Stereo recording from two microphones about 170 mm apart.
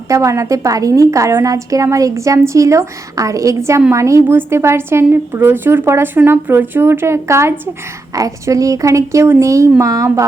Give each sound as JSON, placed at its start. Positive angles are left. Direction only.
{"t": 0.1, "sound": "a woman's voice", "side_deg": -15}